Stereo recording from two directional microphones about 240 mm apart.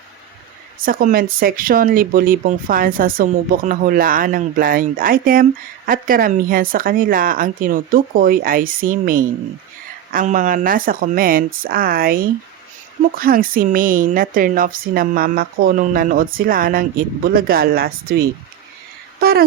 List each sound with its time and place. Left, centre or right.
0.8 s speech: right